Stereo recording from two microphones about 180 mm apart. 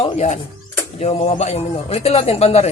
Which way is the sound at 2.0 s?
35° left (ahead or behind).